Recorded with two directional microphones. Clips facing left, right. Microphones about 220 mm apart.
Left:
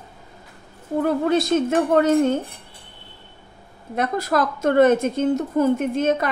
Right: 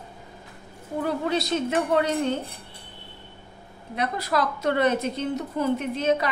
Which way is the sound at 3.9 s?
45° left (ahead or behind).